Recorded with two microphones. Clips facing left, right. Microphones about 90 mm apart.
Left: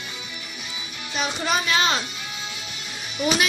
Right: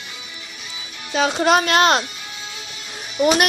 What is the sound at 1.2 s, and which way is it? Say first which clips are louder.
Speech: right 8 dB; 85° right.